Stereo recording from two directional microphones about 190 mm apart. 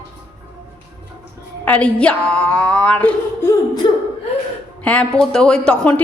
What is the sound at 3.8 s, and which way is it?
Speech, 25° left (ahead or behind).